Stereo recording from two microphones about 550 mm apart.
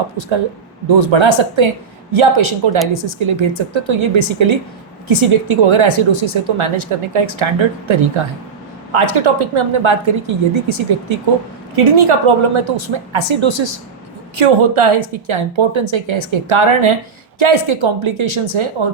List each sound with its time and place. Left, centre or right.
0.9 s a woman's voice: right